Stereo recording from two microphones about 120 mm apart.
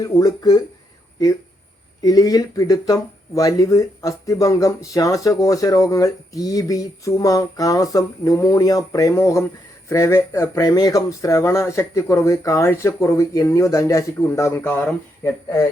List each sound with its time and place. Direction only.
0.0 s speech: 30° left (ahead or behind)
2.0 s speech: 30° left (ahead or behind)